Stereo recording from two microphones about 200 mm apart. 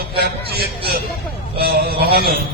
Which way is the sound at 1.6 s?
50° right (ahead or behind).